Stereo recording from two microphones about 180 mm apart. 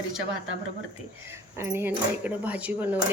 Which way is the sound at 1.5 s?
15° right (ahead or behind).